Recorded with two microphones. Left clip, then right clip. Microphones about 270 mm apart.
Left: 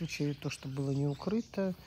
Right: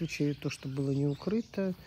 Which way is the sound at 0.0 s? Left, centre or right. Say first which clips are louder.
Right 4 dB; left.